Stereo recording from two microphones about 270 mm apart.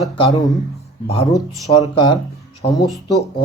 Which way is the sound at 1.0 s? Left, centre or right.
Left.